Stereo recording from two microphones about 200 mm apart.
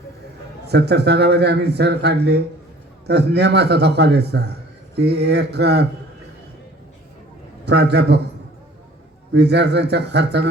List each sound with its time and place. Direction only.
0.7 s speech: 55° right (ahead or behind)
7.6 s a man's voice: 55° right (ahead or behind)
9.3 s speech: 55° right (ahead or behind)